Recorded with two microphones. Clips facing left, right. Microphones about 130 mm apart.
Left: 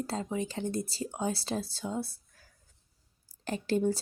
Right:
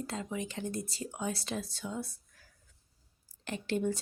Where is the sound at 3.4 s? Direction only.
35° left (ahead or behind).